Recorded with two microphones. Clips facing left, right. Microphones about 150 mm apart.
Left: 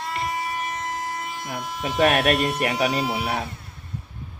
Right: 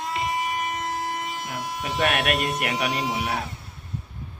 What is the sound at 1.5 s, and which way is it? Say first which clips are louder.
A man's voice: left 1 dB; 25° left (ahead or behind).